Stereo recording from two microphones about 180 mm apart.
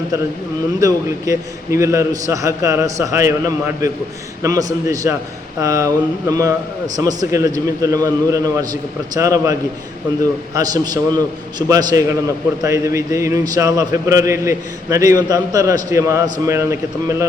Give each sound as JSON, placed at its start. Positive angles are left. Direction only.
{"t": 0.8, "sound": "a man's voice", "side_deg": -20}